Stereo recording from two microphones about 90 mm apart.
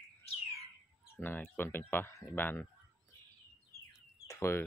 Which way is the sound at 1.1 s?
20° left (ahead or behind).